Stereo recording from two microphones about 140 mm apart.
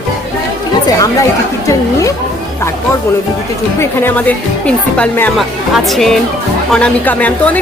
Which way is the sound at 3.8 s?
15° left (ahead or behind).